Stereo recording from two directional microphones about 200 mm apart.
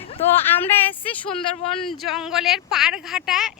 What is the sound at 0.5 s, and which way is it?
Speech, 10° left (ahead or behind).